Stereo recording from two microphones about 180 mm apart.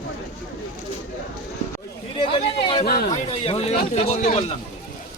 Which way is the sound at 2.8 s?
55° left (ahead or behind).